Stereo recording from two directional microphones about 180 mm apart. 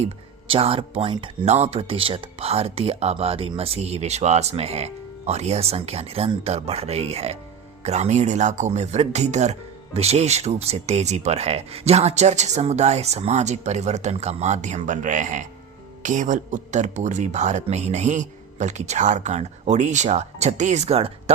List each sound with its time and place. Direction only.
0.0 s speech: 30° right (ahead or behind)